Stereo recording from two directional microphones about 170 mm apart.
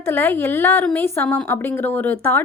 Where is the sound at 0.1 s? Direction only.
10° left (ahead or behind).